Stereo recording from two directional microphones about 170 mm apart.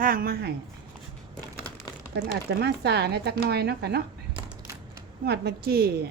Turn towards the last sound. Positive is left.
turn(degrees=-65)  # may be behind; listen again after turning